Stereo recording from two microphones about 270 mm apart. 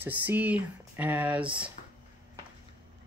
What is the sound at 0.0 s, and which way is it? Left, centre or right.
Speech, centre.